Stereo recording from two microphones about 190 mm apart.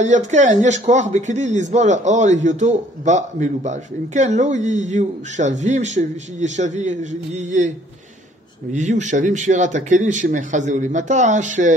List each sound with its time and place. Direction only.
0.3 s speech: 40° right (ahead or behind)
8.7 s speech: 40° right (ahead or behind)